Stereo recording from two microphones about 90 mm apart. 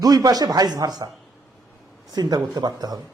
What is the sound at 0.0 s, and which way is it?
Speech, 45° right (ahead or behind).